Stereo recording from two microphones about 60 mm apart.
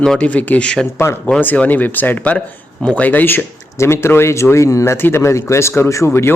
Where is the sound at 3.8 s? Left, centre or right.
Left.